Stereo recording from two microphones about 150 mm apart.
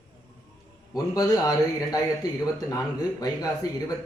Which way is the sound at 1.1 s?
25° left (ahead or behind).